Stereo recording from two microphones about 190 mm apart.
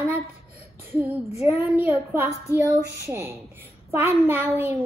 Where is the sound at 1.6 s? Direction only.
10° right (ahead or behind).